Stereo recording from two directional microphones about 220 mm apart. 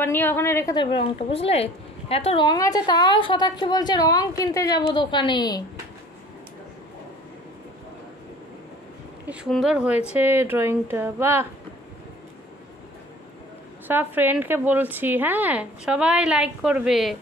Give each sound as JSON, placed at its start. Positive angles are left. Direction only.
{"t": 0.0, "sound": "a woman's voice", "side_deg": 10}
{"t": 9.3, "sound": "a woman's voice", "side_deg": 0}
{"t": 13.8, "sound": "a woman's voice", "side_deg": -10}